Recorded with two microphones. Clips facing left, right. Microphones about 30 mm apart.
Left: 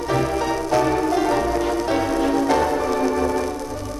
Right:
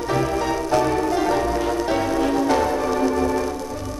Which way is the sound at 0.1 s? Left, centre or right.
Centre.